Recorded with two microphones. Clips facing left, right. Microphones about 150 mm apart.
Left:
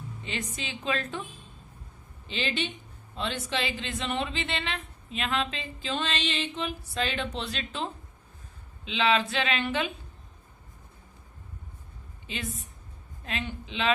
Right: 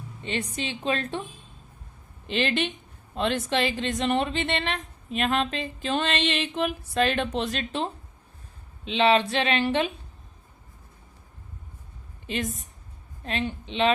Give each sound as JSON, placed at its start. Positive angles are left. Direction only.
{"t": 0.3, "sound": "speech", "side_deg": -35}
{"t": 2.2, "sound": "speech", "side_deg": -60}
{"t": 13.2, "sound": "speech", "side_deg": -35}